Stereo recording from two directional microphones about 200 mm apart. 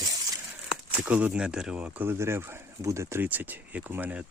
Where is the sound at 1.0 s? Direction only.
5° right (ahead or behind).